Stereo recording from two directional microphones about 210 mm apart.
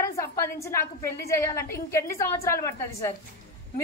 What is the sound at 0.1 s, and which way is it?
A woman's voice, 15° left (ahead or behind).